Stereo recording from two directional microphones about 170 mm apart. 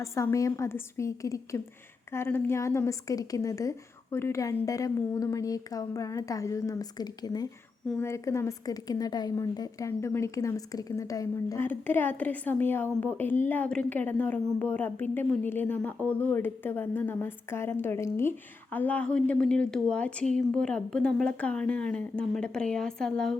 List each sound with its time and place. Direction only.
0.0 s a woman's voice: 15° left (ahead or behind)